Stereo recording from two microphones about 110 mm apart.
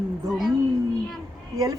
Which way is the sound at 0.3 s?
5° right (ahead or behind).